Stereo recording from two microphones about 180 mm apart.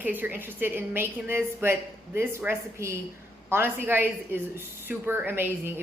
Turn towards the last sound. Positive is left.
turn(degrees=-10)  # may be behind; listen again after turning